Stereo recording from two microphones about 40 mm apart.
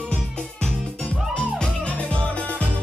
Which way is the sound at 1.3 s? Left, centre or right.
Left.